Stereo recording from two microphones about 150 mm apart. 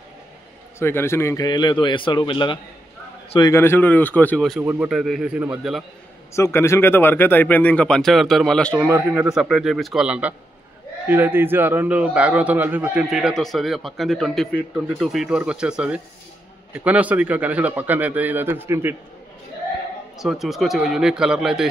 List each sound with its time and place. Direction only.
0.7 s a man's voice: 15° left (ahead or behind)
4.6 s speech: 10° right (ahead or behind)
6.3 s speech: 20° left (ahead or behind)
8.8 s a man's voice: 15° right (ahead or behind)
9.3 s a man's voice: 5° right (ahead or behind)
20.2 s speech: centre (ahead or behind)